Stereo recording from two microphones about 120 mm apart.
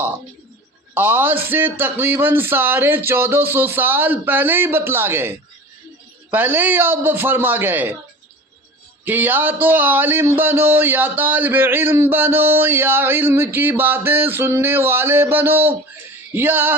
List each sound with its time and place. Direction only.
0.9 s speech: 15° right (ahead or behind)
6.3 s speech: 15° right (ahead or behind)
9.0 s speech: 15° right (ahead or behind)